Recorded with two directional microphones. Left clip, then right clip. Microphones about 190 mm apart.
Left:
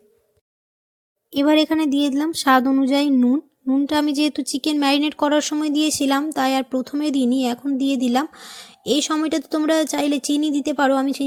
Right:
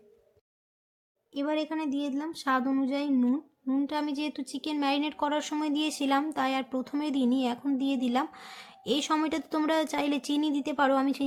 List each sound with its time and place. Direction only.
1.3 s a woman's voice: 50° left (ahead or behind); by 11.2 s 25° left (ahead or behind)